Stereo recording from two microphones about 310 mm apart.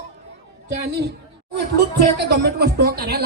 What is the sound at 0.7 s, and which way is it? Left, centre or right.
Speech, right.